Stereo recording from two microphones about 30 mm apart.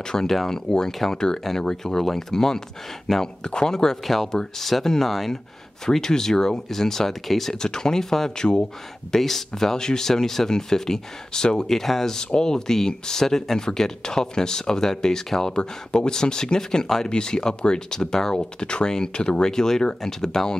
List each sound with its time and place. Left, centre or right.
0.0 s speech: centre
0.3 s speech: centre
0.7 s speech: left
3.4 s speech: left
4.0 s speech: centre
5.9 s speech: centre
7.5 s speech: left
8.4 s speech: left
9.1 s speech: centre
15.5 s speech: left
18.6 s speech: left
19.5 s speech: centre